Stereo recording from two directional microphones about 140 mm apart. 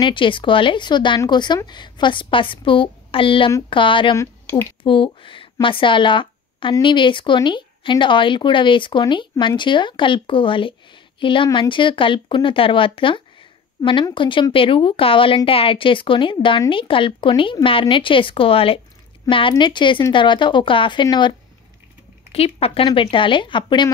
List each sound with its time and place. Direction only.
0.0 s speech: 35° left (ahead or behind)
4.2 s speech: 15° left (ahead or behind)
4.8 s a woman's voice: 35° left (ahead or behind)
22.3 s speech: 45° left (ahead or behind)